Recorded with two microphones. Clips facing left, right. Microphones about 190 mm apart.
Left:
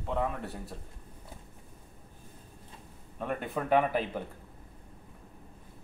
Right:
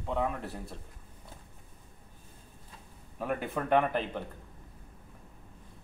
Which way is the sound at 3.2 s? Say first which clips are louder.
Right 1 dB; centre (ahead or behind).